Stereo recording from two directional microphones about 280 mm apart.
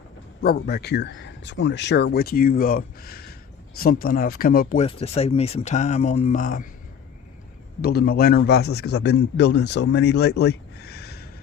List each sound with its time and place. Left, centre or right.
0.4 s a man's voice: left
7.8 s a man's voice: left